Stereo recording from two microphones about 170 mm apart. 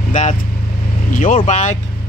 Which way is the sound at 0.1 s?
45° left (ahead or behind).